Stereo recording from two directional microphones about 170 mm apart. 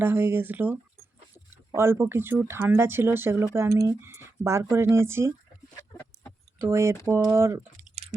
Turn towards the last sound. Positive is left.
turn(degrees=-15)  # may be behind; listen again after turning